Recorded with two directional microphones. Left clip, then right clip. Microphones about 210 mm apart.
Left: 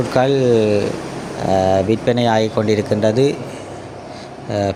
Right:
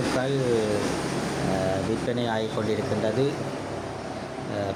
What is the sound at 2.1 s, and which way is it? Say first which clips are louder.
Speech: left 11 dB; 40° left (ahead or behind).